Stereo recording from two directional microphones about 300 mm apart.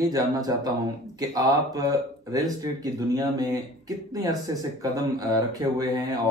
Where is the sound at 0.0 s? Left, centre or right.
Centre.